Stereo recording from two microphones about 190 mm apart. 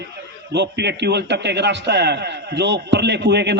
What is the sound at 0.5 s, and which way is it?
A man's voice, 60° right (ahead or behind).